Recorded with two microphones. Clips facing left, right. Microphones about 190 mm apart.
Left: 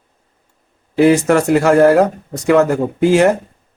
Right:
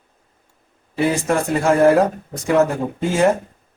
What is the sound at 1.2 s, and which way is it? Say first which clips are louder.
Speech: left 5 dB; 75° left (ahead or behind).